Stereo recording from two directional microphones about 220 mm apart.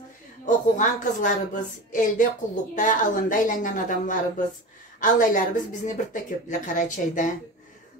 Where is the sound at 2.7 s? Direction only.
35° left (ahead or behind).